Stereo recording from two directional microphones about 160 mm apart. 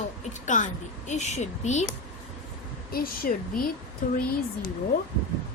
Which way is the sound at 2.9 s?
65° left (ahead or behind).